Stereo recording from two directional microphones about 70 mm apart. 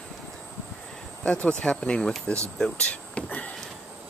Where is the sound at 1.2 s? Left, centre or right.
Centre.